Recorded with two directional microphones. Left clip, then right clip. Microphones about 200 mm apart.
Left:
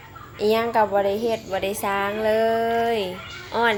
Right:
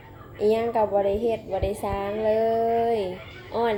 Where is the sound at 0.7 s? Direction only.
45° left (ahead or behind).